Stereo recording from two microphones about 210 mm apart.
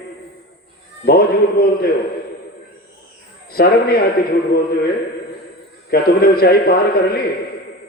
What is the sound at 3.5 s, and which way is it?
A man's voice, 45° left (ahead or behind).